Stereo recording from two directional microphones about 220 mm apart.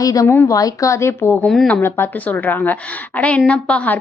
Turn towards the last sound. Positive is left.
turn(degrees=5)  # may be behind; listen again after turning